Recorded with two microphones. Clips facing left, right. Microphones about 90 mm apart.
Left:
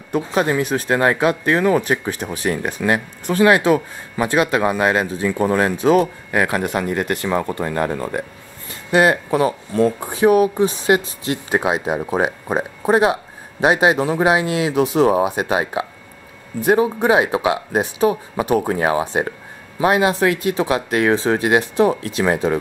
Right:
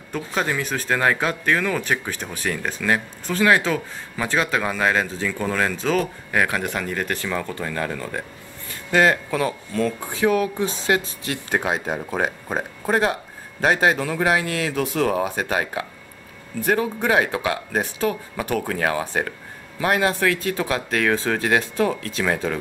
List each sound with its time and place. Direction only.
0.1 s speech: 20° left (ahead or behind)
7.6 s speech: 30° left (ahead or behind)
8.9 s speech: 15° left (ahead or behind)